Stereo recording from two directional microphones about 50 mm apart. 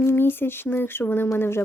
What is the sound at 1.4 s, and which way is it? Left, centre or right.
Speech, left.